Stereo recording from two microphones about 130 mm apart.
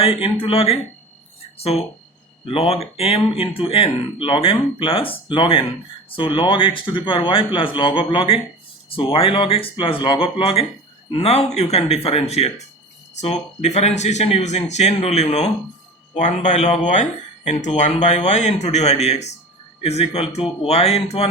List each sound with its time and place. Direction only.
0.0 s speech: 45° left (ahead or behind)
2.4 s speech: 45° left (ahead or behind)